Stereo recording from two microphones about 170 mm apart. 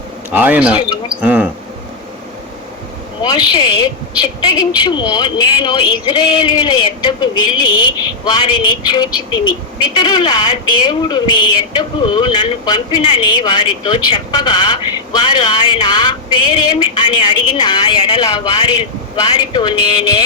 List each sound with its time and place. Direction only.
0.3 s speech: 10° right (ahead or behind)
3.2 s a woman's voice: 25° left (ahead or behind)